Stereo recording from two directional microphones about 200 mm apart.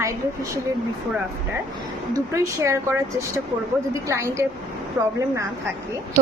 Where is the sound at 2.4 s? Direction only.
15° right (ahead or behind).